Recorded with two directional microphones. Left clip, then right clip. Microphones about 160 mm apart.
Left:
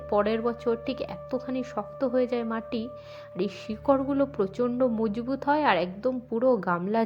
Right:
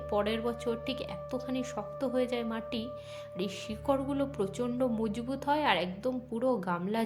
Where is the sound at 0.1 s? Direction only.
30° left (ahead or behind).